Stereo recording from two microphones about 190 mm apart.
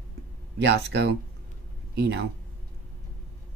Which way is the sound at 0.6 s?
60° right (ahead or behind).